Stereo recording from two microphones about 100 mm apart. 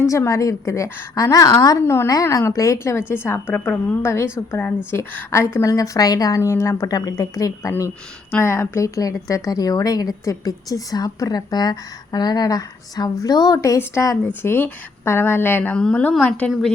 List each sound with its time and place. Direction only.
0.0 s a woman's voice: 30° left (ahead or behind)
1.8 s a woman's voice: 25° left (ahead or behind)
8.3 s a woman's voice: 25° left (ahead or behind); by 13.6 s 40° left (ahead or behind)
13.6 s a woman's voice: 30° left (ahead or behind)
15.8 s a woman's voice: 10° left (ahead or behind)
16.5 s a woman's voice: centre (ahead or behind)